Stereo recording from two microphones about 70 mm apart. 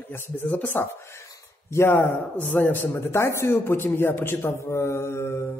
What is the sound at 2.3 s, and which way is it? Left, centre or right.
Speech, left.